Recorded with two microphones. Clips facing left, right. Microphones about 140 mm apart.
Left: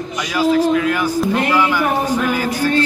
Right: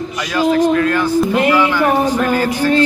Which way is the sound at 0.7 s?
10° left (ahead or behind).